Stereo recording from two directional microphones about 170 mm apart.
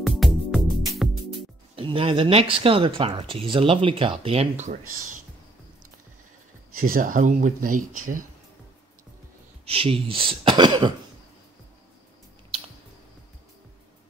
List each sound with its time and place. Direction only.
0.0 s music: centre (ahead or behind)
1.8 s speech: 30° right (ahead or behind); by 5.2 s 45° right (ahead or behind)
6.8 s speech: 55° right (ahead or behind)
9.7 s speech: 35° right (ahead or behind)